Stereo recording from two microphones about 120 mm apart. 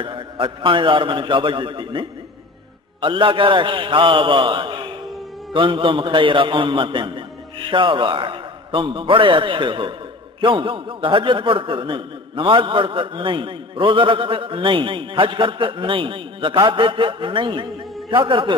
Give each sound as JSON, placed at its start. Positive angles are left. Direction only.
{"t": 0.0, "sound": "a man's voice", "side_deg": -45}